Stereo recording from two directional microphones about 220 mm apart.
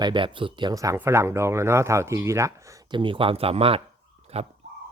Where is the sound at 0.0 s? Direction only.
20° right (ahead or behind).